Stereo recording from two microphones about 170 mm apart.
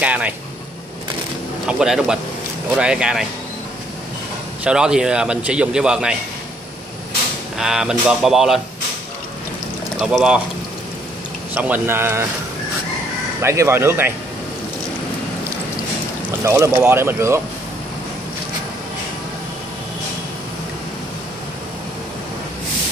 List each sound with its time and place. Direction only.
0.0 s speech: 10° right (ahead or behind)
1.7 s a man's voice: 5° right (ahead or behind)
4.6 s a man's voice: 5° right (ahead or behind)
7.5 s a man's voice: 5° right (ahead or behind)
9.9 s a man's voice: 5° right (ahead or behind)
11.5 s speech: 10° right (ahead or behind)
13.4 s speech: 15° right (ahead or behind)
16.4 s speech: 15° right (ahead or behind)